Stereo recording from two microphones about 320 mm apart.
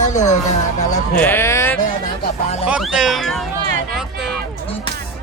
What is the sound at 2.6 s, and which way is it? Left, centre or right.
Speech, centre.